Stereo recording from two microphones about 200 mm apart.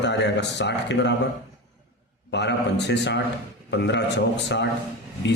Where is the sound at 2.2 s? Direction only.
60° left (ahead or behind).